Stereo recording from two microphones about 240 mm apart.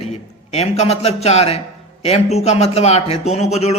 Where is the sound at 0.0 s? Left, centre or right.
Left.